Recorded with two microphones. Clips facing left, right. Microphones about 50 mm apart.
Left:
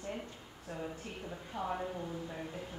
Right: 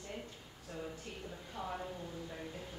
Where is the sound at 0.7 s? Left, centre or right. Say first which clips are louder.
Left 3 dB; left.